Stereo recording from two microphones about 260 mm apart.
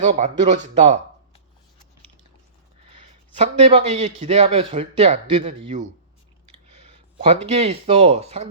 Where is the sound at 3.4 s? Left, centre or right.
Right.